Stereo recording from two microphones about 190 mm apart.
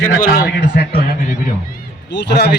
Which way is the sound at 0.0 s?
45° left (ahead or behind).